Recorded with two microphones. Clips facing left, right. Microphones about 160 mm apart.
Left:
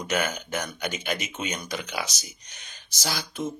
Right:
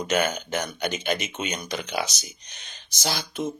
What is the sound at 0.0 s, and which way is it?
Speech, 20° right (ahead or behind).